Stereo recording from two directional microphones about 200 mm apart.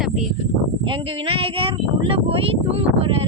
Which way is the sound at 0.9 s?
25° right (ahead or behind).